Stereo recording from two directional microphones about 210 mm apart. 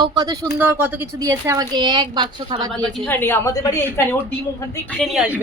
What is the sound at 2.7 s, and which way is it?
A woman's voice, 5° left (ahead or behind).